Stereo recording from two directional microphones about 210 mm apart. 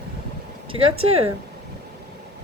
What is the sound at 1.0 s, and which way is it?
Speech, 30° right (ahead or behind).